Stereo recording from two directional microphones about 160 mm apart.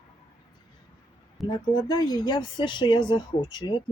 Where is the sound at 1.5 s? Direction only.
25° left (ahead or behind).